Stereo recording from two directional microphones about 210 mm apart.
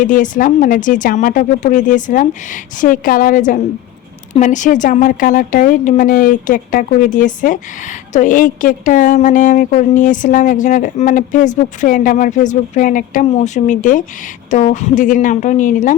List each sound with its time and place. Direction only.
0.0 s a woman's voice: 40° left (ahead or behind)